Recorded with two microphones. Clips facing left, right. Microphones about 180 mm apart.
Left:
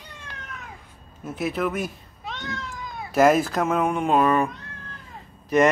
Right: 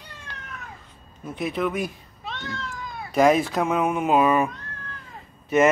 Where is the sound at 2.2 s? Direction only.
15° left (ahead or behind).